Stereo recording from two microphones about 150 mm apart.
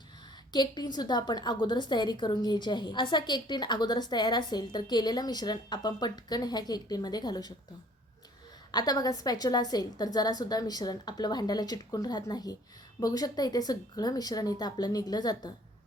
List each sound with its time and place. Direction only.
0.5 s a woman's voice: 30° left (ahead or behind)
8.7 s a woman's voice: 25° left (ahead or behind)